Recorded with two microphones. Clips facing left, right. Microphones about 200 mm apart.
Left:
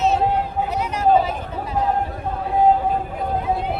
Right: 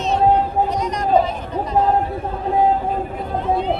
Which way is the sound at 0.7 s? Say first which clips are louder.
Left 4 dB; 5° left (ahead or behind).